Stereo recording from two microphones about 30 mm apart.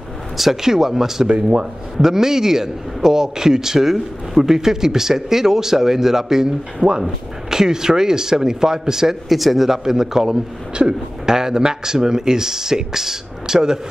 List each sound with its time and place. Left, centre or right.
0.4 s speech: centre
3.8 s speech: centre
4.6 s speech: centre
9.3 s a man's voice: centre
9.7 s speech: centre
10.7 s speech: right